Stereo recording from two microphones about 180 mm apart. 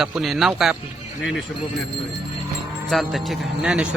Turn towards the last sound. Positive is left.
turn(degrees=-5)  # may be behind; listen again after turning